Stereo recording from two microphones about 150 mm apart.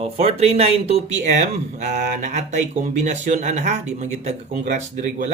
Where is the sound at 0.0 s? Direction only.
40° right (ahead or behind).